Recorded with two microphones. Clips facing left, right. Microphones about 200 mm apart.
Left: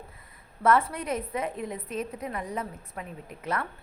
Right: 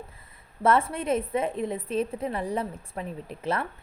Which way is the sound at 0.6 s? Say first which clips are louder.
Right 1 dB; 25° right (ahead or behind).